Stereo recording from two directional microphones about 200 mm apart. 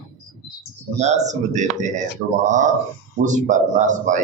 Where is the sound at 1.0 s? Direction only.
35° right (ahead or behind).